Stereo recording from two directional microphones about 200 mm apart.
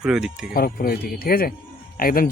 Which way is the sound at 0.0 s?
5° right (ahead or behind).